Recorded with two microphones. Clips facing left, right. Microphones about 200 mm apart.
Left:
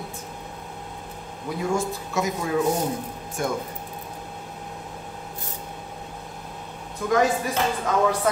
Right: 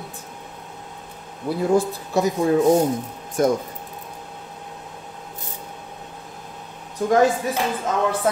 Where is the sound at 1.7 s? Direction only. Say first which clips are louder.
Right 8 dB; 35° right (ahead or behind).